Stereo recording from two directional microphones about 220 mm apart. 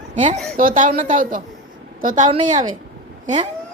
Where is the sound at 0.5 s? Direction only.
35° right (ahead or behind).